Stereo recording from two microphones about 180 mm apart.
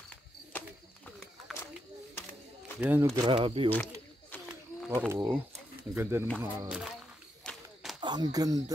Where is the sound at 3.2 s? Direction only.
30° right (ahead or behind).